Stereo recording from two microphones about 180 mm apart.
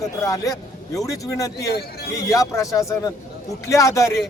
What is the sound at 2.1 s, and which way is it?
A man's voice, 15° left (ahead or behind).